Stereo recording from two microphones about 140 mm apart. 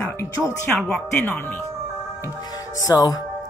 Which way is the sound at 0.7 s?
5° left (ahead or behind).